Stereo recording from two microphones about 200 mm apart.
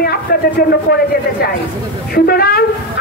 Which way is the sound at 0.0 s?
50° left (ahead or behind).